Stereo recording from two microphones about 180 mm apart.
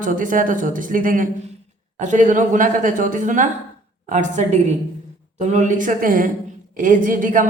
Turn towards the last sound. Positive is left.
turn(degrees=-45)  # may be behind; listen again after turning